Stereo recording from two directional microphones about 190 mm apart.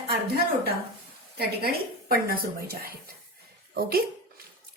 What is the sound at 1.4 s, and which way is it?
Speech, 55° right (ahead or behind).